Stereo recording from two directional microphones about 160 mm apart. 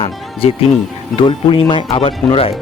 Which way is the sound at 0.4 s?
40° left (ahead or behind).